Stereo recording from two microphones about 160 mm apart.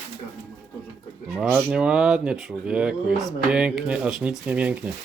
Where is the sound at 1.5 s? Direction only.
5° right (ahead or behind).